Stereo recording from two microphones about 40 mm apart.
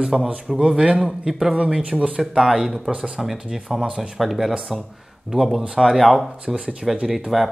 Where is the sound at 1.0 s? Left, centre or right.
Centre.